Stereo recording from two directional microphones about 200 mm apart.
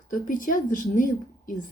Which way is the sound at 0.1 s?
40° left (ahead or behind).